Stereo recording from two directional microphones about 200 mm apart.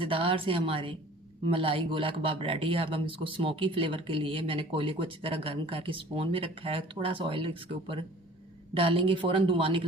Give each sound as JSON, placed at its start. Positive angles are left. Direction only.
{"t": 0.0, "sound": "speech", "side_deg": -25}